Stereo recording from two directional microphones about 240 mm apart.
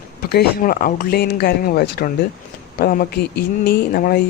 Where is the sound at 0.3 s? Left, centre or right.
Left.